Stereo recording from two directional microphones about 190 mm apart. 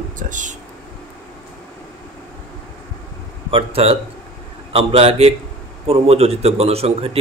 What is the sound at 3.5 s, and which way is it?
A man's voice, 30° right (ahead or behind).